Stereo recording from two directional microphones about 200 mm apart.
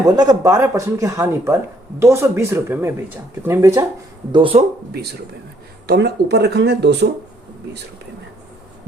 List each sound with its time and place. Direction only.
0.0 s speech: 20° right (ahead or behind)
4.3 s speech: 25° right (ahead or behind)
5.9 s speech: 55° right (ahead or behind)